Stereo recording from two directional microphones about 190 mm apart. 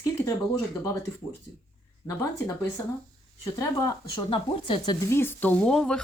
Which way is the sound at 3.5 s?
20° left (ahead or behind).